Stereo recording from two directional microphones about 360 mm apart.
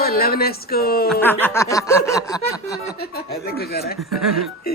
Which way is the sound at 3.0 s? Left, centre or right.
Left.